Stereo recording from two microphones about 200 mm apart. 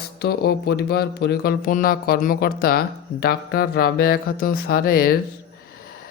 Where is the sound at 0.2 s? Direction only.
50° left (ahead or behind).